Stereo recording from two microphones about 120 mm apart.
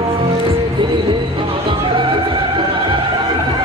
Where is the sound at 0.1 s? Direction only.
50° right (ahead or behind).